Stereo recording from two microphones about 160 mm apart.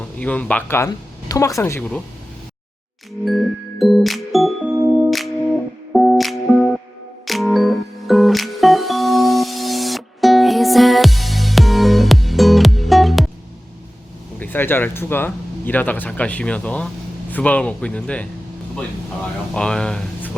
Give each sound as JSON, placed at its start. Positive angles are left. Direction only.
{"t": 0.2, "sound": "speech", "side_deg": 10}
{"t": 3.2, "sound": "music", "side_deg": 0}
{"t": 4.7, "sound": "music", "side_deg": -15}
{"t": 5.1, "sound": "music", "side_deg": 0}
{"t": 14.3, "sound": "speech", "side_deg": 10}